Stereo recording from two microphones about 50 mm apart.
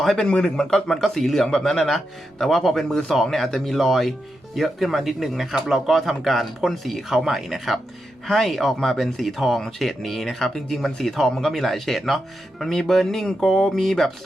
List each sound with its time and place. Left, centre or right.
0.0 s a man's voice: centre
0.3 s a man's voice: centre
0.5 s speech: centre